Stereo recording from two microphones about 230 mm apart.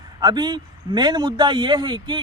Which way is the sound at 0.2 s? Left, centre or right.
Centre.